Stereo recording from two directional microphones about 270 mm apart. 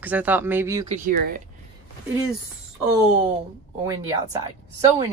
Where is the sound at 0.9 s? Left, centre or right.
Right.